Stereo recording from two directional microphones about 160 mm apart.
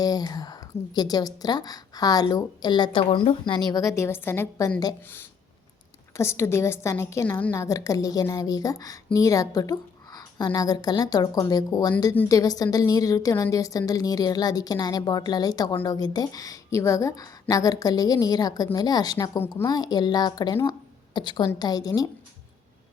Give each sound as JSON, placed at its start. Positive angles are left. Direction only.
{"t": 0.0, "sound": "a woman's voice", "side_deg": 25}